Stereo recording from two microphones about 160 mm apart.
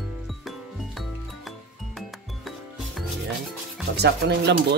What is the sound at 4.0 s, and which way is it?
Speech, 90° right.